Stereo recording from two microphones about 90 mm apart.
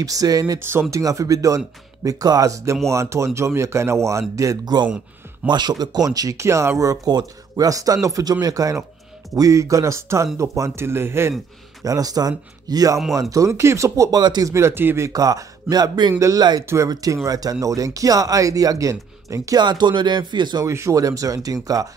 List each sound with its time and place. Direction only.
0.0 s speech: 40° right (ahead or behind)
0.6 s speech: 25° right (ahead or behind)
4.8 s speech: 15° right (ahead or behind)
5.5 s speech: 50° right (ahead or behind); by 7.0 s 35° right (ahead or behind)
7.1 s speech: 45° right (ahead or behind); by 11.3 s 30° right (ahead or behind)
11.8 s speech: 45° right (ahead or behind)
14.2 s speech: 50° right (ahead or behind)
14.5 s speech: 30° right (ahead or behind); by 16.2 s 50° right (ahead or behind)
16.2 s speech: 40° right (ahead or behind)
19.6 s speech: 55° right (ahead or behind)
20.6 s speech: 35° right (ahead or behind)